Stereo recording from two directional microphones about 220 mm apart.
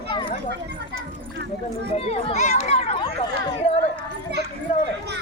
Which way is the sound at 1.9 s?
30° left (ahead or behind).